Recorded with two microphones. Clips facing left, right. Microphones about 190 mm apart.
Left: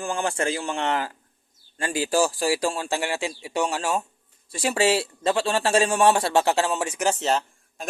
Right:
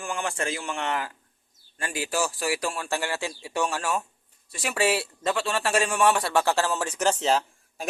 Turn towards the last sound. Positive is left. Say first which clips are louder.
# even
turn(degrees=0)  # may be behind; listen again after turning